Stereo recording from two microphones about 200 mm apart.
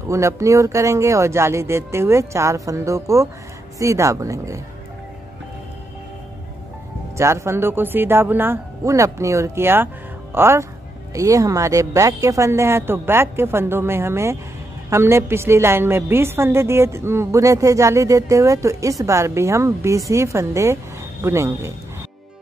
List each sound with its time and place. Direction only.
0.1 s a woman's voice: 15° right (ahead or behind)
7.2 s a woman's voice: 15° right (ahead or behind)